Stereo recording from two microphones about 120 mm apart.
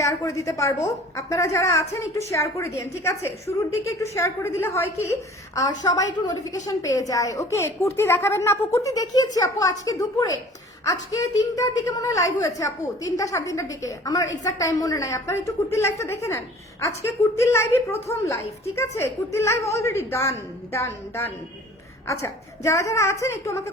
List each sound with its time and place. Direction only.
0.0 s a woman's voice: 25° left (ahead or behind)